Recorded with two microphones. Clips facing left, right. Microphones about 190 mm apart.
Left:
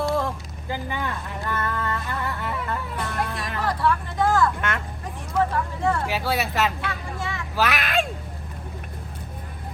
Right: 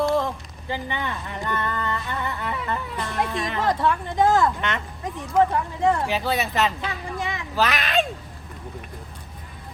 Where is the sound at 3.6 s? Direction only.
20° right (ahead or behind).